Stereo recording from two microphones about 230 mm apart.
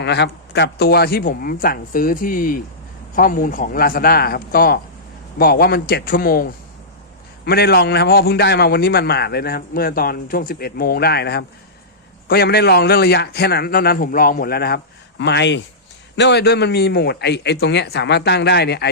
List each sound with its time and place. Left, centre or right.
0.0 s a man's voice: left